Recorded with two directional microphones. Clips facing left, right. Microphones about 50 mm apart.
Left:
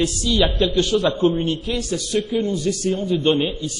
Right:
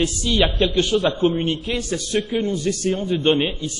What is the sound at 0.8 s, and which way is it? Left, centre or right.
A man's voice, right.